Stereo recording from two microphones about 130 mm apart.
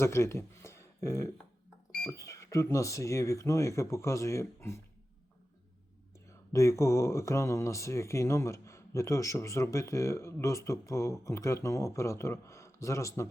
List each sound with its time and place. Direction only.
0.0 s speech: 20° left (ahead or behind)
6.5 s speech: 25° left (ahead or behind)